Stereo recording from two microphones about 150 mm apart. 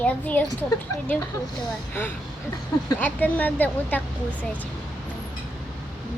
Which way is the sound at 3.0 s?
10° left (ahead or behind).